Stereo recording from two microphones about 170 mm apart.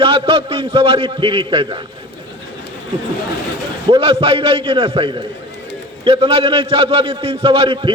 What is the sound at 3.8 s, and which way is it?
A man's voice, 30° right (ahead or behind).